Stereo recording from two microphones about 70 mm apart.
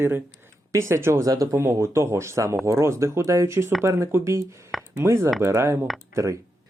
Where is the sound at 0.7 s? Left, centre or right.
Right.